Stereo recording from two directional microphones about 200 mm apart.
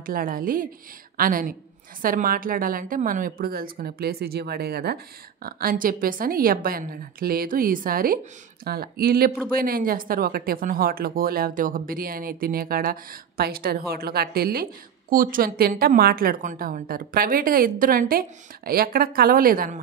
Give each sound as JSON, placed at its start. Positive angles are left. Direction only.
{"t": 0.0, "sound": "speech", "side_deg": -45}